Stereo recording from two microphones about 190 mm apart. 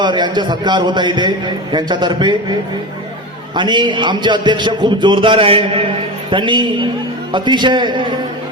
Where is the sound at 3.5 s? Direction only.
25° right (ahead or behind).